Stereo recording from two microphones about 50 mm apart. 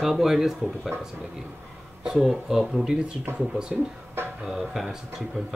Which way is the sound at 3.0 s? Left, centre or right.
Right.